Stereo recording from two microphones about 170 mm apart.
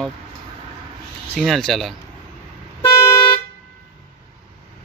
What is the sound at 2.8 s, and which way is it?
Toot, 25° left (ahead or behind).